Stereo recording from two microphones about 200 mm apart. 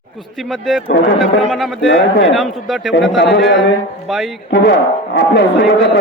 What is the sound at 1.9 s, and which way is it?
Speech, 65° left (ahead or behind).